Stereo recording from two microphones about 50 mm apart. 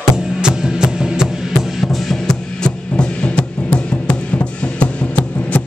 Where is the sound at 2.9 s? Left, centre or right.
Left.